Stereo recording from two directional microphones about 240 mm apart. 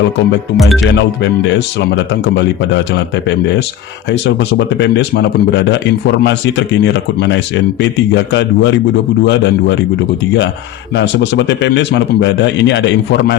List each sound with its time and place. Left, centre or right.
2.2 s speech: left
10.9 s speech: left